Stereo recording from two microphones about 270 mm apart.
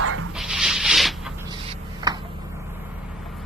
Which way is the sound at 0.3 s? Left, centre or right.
Centre.